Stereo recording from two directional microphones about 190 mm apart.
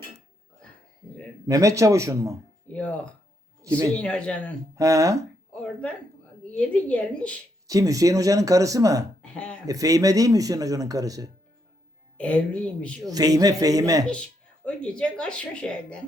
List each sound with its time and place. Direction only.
1.5 s speech: 15° right (ahead or behind)
2.7 s speech: 5° left (ahead or behind)
4.8 s speech: 15° right (ahead or behind)
6.5 s speech: 5° left (ahead or behind)
7.7 s speech: 15° right (ahead or behind)
9.2 s speech: 5° left (ahead or behind)
9.6 s a man's voice: 20° right (ahead or behind)
12.1 s speech: 5° left (ahead or behind)
13.1 s a man's voice: 20° right (ahead or behind)
14.1 s speech: 5° left (ahead or behind)